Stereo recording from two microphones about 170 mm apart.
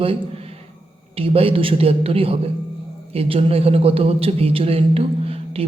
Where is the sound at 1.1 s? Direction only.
35° right (ahead or behind).